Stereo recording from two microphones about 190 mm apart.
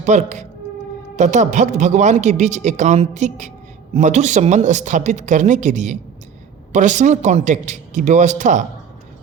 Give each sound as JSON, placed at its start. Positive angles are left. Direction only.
{"t": 0.0, "sound": "a man's voice", "side_deg": -40}